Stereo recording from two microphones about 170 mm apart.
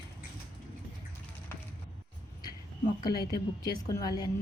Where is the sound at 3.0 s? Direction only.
20° left (ahead or behind).